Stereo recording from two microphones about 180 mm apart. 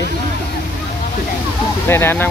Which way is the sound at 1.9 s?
10° left (ahead or behind).